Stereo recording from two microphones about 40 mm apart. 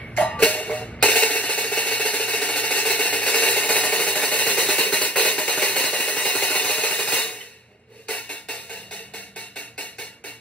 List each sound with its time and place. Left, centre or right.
0.3 s train: left
0.6 s music: left
1.0 s hi-hat: left
8.1 s music: left